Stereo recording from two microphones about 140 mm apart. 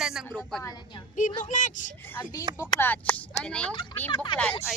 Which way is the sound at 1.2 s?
65° left (ahead or behind).